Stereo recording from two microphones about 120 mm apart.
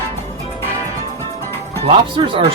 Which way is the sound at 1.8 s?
45° right (ahead or behind).